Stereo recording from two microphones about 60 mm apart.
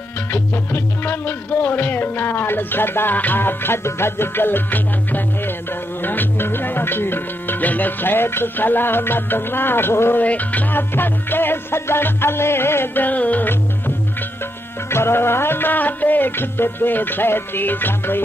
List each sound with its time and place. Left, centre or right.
0.3 s music: left
10.2 s music: left
14.9 s music: left